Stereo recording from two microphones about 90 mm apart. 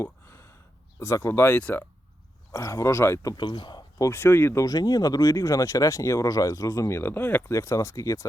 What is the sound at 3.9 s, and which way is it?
Speech, 30° left (ahead or behind).